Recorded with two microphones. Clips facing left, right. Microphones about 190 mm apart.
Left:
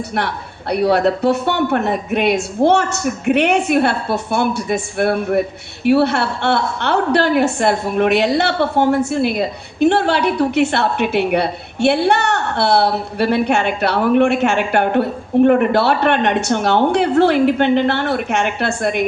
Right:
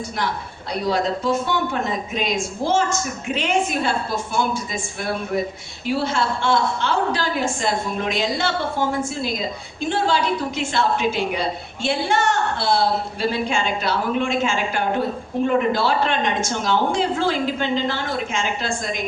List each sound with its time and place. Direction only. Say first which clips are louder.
0.1 s speech: left 4 dB; 65° left (ahead or behind)